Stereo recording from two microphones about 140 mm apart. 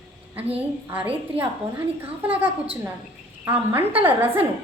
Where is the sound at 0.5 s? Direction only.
10° right (ahead or behind).